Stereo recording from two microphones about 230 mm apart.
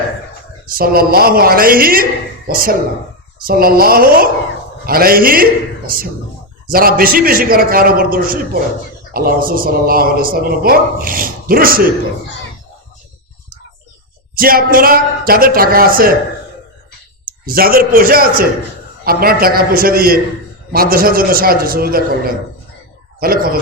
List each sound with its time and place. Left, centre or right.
0.7 s a man's voice: right
14.3 s a man's voice: right
17.2 s a man's voice: right
23.2 s a man's voice: right